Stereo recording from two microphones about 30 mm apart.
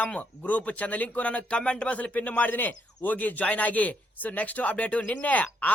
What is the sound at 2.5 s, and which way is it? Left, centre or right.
A man's voice, left.